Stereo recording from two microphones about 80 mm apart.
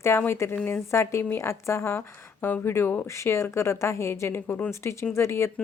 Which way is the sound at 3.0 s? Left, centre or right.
Left.